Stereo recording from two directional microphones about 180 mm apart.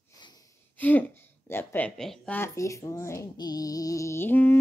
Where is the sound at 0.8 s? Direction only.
10° left (ahead or behind).